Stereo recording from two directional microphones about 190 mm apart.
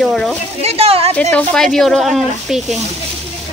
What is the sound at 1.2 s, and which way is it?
Speech, 5° left (ahead or behind).